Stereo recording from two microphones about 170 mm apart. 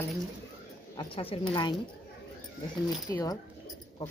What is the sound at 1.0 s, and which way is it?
Speech, 30° left (ahead or behind).